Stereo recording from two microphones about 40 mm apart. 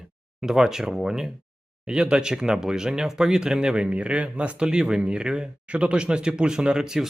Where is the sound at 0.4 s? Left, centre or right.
Centre; by 4.5 s right.